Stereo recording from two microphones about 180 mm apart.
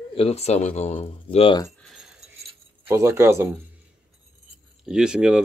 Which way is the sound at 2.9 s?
15° right (ahead or behind).